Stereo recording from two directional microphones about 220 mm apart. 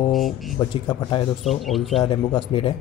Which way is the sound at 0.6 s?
15° left (ahead or behind).